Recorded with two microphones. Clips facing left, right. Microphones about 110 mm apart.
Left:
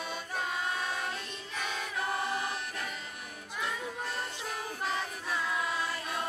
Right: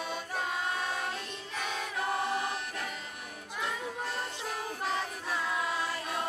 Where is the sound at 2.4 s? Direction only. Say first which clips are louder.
Right 1 dB; 50° right (ahead or behind).